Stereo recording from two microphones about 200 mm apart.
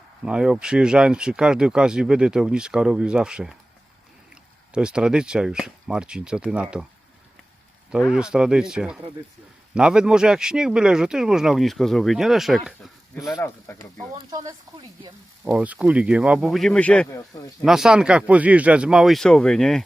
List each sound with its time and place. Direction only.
0.3 s speech: 5° right (ahead or behind)
4.7 s speech: 5° right (ahead or behind)
7.9 s speech: 5° right (ahead or behind)
13.3 s speech: 15° left (ahead or behind)
14.2 s speech: 20° right (ahead or behind)
15.5 s speech: 5° right (ahead or behind)